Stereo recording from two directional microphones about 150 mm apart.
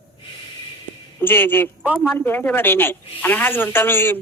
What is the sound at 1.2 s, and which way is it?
Speech, 15° left (ahead or behind).